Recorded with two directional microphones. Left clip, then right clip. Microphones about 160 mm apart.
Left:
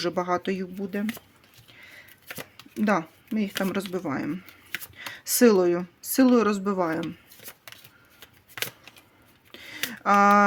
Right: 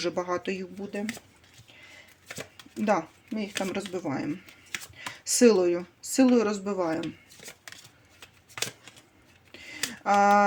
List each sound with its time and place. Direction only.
0.0 s speech: 35° left (ahead or behind)
2.8 s speech: 40° left (ahead or behind)
9.5 s a sound: 45° left (ahead or behind)
10.0 s speech: 45° left (ahead or behind)